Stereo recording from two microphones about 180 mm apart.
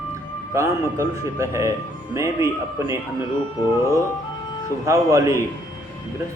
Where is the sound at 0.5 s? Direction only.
15° right (ahead or behind).